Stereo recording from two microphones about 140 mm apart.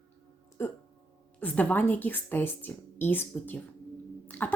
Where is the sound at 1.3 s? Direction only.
10° left (ahead or behind).